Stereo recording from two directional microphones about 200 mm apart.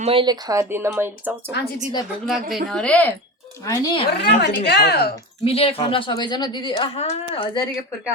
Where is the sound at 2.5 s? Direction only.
Centre (ahead or behind).